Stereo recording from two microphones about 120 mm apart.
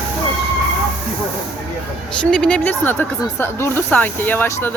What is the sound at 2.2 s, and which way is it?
Speech, 5° left (ahead or behind).